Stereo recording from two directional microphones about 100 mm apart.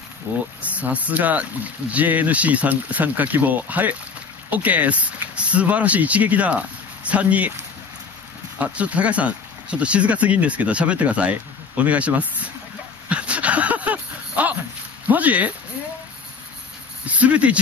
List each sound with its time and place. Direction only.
0.6 s speech: 15° right (ahead or behind)
8.5 s speech: 15° right (ahead or behind)
13.1 s a sound: 10° right (ahead or behind)
15.0 s speech: 15° right (ahead or behind)
17.0 s speech: 15° right (ahead or behind)